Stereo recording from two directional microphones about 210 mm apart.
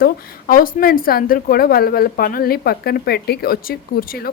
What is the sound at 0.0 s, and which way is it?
A woman's voice, 45° left (ahead or behind).